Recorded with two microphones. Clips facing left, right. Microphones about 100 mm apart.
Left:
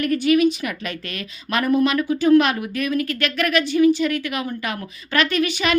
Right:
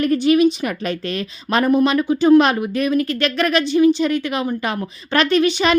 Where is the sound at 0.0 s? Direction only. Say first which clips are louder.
Right 3 dB; 25° right (ahead or behind).